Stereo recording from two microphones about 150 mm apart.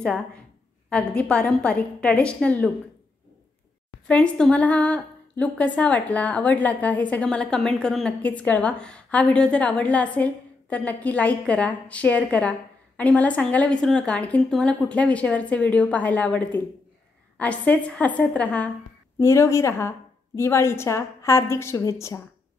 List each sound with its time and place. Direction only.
0.8 s a woman's voice: 5° left (ahead or behind)
4.1 s a woman's voice: 5° left (ahead or behind)